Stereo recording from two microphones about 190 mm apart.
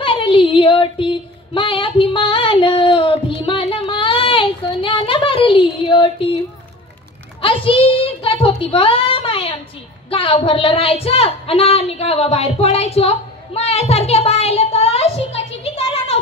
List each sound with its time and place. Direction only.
0.0 s female singing: 30° left (ahead or behind)
7.4 s a sound: 30° left (ahead or behind)
10.0 s speech: 30° left (ahead or behind)